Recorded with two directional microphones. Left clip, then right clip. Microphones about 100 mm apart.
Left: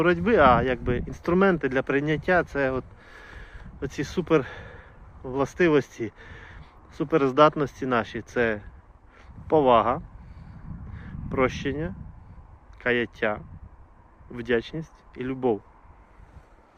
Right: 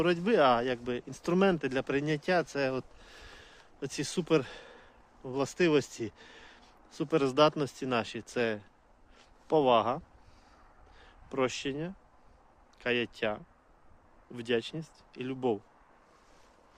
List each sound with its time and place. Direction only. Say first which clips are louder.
0.0 s speech: left 7 dB; 25° right (ahead or behind)